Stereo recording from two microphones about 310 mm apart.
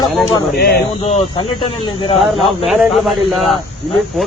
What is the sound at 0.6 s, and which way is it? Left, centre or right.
Speech, left.